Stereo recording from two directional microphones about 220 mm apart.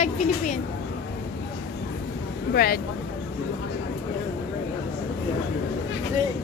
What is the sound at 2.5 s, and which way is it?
Speech, 45° left (ahead or behind).